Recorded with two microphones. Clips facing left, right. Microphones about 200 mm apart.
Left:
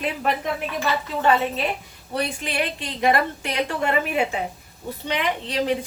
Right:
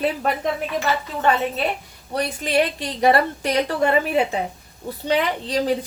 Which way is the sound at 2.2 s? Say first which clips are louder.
Right 5 dB; 40° right (ahead or behind).